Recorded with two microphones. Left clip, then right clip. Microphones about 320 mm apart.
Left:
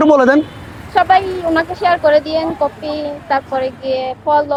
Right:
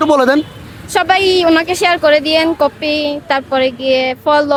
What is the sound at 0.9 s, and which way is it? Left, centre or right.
A woman's voice, right.